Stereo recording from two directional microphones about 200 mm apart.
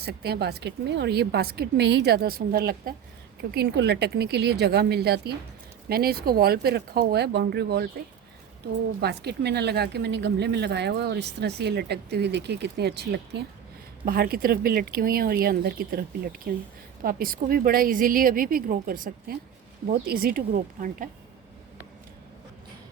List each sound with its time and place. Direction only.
0.0 s a woman's voice: 55° right (ahead or behind)
9.0 s a woman's voice: 55° right (ahead or behind)